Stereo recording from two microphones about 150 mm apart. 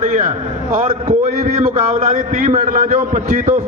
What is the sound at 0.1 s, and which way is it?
A man's voice, 65° right (ahead or behind).